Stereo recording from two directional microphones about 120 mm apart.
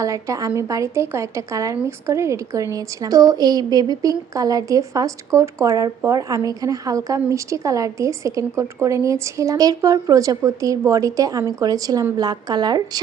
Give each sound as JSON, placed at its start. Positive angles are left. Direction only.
{"t": 0.0, "sound": "a woman's voice", "side_deg": -25}